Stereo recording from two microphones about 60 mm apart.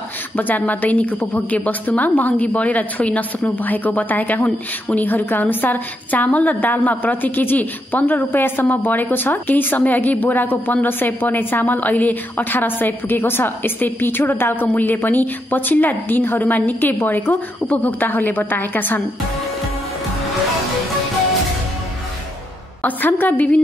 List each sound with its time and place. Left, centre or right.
0.4 s a woman's voice: left
22.8 s a woman's voice: left